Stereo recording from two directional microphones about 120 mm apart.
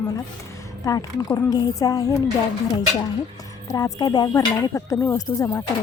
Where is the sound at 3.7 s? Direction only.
35° left (ahead or behind).